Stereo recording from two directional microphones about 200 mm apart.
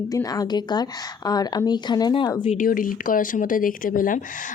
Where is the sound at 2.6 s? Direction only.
45° left (ahead or behind).